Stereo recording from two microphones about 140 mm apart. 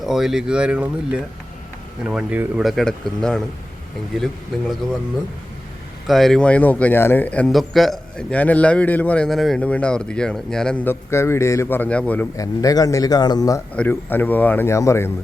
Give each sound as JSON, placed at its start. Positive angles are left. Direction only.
{"t": 0.0, "sound": "speech", "side_deg": 0}
{"t": 2.6, "sound": "speech", "side_deg": 5}
{"t": 6.1, "sound": "a man's voice", "side_deg": 0}
{"t": 12.4, "sound": "a man's voice", "side_deg": 25}
{"t": 13.7, "sound": "a man's voice", "side_deg": 15}